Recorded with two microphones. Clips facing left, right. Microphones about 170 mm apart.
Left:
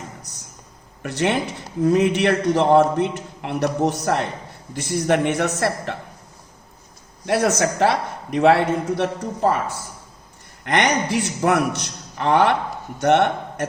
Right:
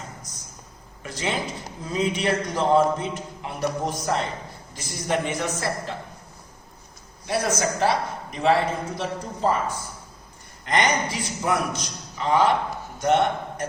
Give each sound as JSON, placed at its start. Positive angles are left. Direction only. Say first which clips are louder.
{"t": 1.0, "sound": "a man's voice", "louder": "left 7 dB", "side_deg": 70}
{"t": 7.3, "sound": "a man's voice", "louder": "left 5 dB", "side_deg": 70}
{"t": 10.7, "sound": "a man's voice", "louder": "left 3 dB", "side_deg": 70}